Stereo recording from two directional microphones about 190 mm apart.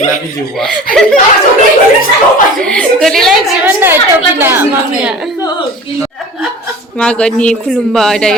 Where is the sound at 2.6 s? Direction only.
5° left (ahead or behind).